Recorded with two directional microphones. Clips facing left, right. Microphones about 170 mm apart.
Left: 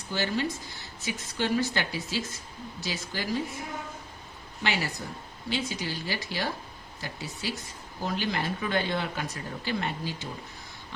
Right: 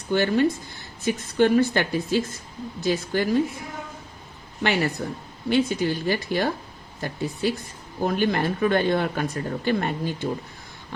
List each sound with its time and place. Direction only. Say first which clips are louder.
0.1 s speech: right 9 dB; 55° right (ahead or behind)
4.6 s speech: right 7 dB; 55° right (ahead or behind)